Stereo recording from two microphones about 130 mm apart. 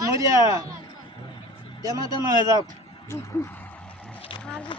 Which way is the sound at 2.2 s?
30° right (ahead or behind).